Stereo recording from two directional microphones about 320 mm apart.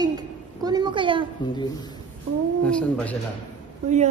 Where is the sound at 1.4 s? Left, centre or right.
Centre.